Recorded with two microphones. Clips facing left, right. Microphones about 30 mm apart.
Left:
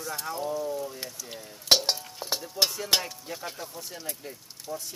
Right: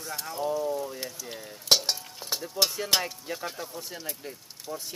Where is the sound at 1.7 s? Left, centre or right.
Centre.